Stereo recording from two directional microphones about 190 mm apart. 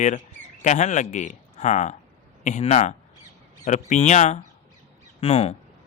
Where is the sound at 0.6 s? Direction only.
40° left (ahead or behind).